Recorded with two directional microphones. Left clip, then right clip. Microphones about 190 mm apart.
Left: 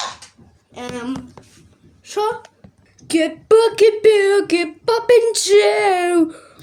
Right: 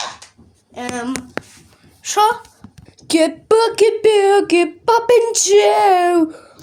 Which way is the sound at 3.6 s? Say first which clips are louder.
Right 1 dB; 5° right (ahead or behind).